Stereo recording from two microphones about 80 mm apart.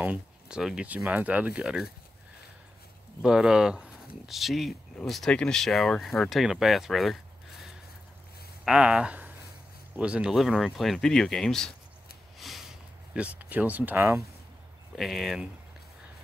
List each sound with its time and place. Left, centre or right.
0.0 s a sound: centre
0.6 s speech: centre
0.8 s speech: centre
3.2 s speech: centre
8.6 s speech: centre
10.3 s speech: centre
12.4 s a sound: centre
13.2 s speech: centre
15.0 s speech: centre